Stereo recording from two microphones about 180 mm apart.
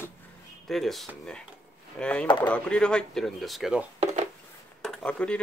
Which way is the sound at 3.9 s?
35° right (ahead or behind).